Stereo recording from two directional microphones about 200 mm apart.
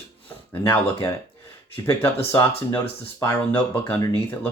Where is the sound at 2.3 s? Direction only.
10° left (ahead or behind).